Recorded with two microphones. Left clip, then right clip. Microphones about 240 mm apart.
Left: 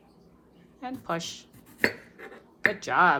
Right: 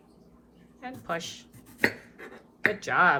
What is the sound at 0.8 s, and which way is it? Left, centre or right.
Speech, centre.